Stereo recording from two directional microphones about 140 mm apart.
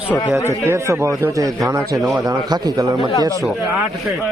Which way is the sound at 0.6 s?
20° right (ahead or behind).